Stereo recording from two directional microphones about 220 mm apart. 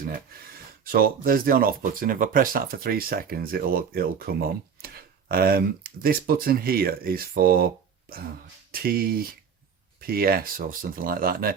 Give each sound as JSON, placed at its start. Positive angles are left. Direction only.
{"t": 0.9, "sound": "speech", "side_deg": -40}
{"t": 8.7, "sound": "speech", "side_deg": -40}